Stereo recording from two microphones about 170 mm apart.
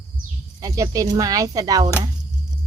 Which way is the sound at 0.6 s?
20° right (ahead or behind).